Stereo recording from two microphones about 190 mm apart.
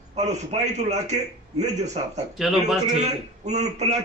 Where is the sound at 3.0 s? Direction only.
35° right (ahead or behind).